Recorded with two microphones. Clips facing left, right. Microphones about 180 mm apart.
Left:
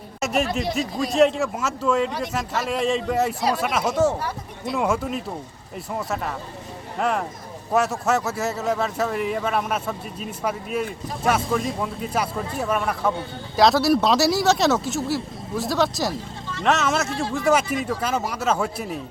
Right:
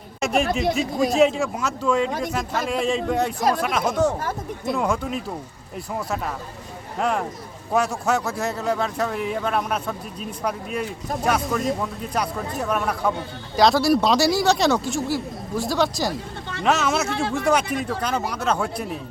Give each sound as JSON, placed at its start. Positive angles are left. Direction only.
{"t": 0.2, "sound": "a man's voice", "side_deg": 0}
{"t": 4.2, "sound": "a sound", "side_deg": -50}
{"t": 4.7, "sound": "a man's voice", "side_deg": 5}